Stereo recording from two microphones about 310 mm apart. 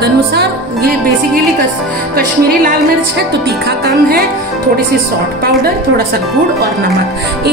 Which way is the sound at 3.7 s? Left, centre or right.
Right.